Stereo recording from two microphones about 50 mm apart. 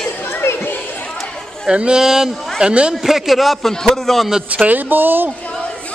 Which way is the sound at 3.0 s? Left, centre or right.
Centre.